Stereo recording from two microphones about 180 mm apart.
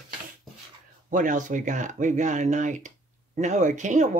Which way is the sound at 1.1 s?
45° right (ahead or behind).